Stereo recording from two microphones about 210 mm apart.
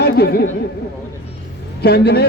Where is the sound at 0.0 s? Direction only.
50° left (ahead or behind).